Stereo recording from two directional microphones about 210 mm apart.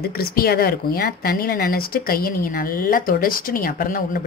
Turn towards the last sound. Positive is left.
turn(degrees=40)  # may be behind; listen again after turning